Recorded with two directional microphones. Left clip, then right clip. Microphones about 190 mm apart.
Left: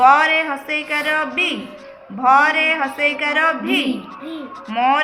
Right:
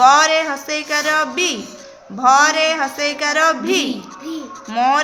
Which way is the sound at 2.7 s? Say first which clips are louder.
Left 1 dB; 40° right (ahead or behind).